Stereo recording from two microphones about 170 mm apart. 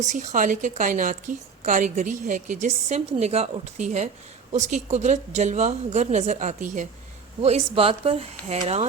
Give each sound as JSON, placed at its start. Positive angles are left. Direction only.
{"t": 0.0, "sound": "a woman's voice", "side_deg": -45}